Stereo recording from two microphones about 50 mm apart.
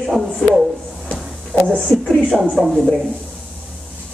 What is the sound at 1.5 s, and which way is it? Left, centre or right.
Speech, left.